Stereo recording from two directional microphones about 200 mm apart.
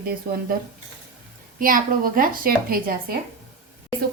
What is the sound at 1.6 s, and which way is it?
Speech, 45° right (ahead or behind).